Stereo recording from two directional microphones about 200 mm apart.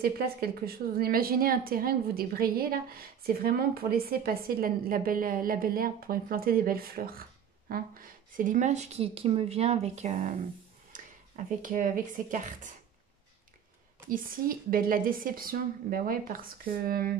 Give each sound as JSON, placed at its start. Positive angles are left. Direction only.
{"t": 0.0, "sound": "a woman's voice", "side_deg": -50}
{"t": 14.0, "sound": "a woman's voice", "side_deg": -45}